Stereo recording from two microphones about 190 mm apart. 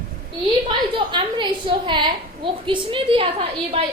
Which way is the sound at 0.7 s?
25° right (ahead or behind).